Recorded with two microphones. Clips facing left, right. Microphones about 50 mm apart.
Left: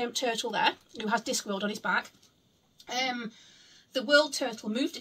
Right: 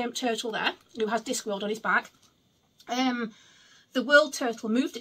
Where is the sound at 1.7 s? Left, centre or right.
Right.